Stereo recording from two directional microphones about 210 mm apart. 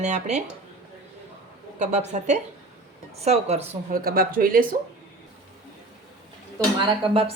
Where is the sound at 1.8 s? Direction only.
35° right (ahead or behind).